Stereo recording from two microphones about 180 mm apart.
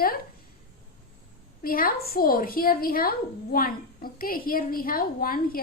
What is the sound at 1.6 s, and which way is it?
A woman's voice, 55° left (ahead or behind).